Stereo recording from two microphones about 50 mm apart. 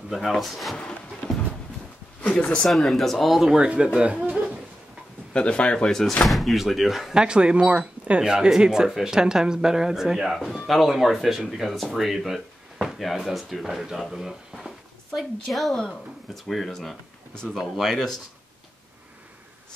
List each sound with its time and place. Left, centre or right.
0.1 s speech: centre
0.7 s music: centre
2.4 s speech: left
2.7 s speech: centre
3.6 s speech: right
5.3 s speech: left
5.9 s speech: centre
7.2 s speech: centre
10.4 s speech: centre
17.6 s speech: centre